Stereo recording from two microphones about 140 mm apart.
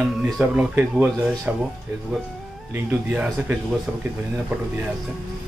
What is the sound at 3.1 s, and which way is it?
Speech, 10° right (ahead or behind).